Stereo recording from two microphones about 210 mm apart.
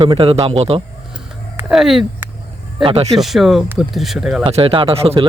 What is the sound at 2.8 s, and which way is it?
Speech, 25° right (ahead or behind).